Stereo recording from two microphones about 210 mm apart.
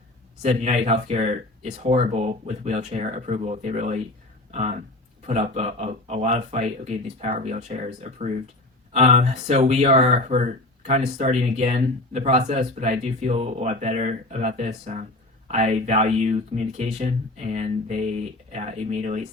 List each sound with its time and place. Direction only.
0.4 s speech: 30° right (ahead or behind)